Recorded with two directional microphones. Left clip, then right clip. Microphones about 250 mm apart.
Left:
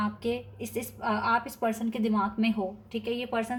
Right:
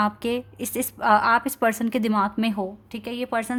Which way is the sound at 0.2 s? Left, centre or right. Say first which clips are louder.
Right 5 dB; right.